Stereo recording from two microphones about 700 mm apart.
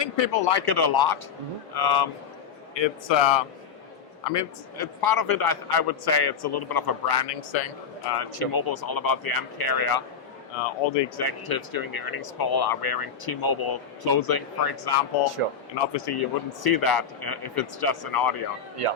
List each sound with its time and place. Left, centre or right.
0.0 s speech: left